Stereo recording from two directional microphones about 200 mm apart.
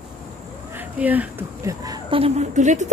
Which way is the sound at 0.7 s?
10° right (ahead or behind).